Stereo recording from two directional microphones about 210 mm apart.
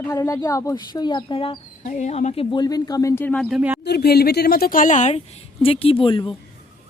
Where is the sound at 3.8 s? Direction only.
50° left (ahead or behind); by 6.4 s 25° left (ahead or behind).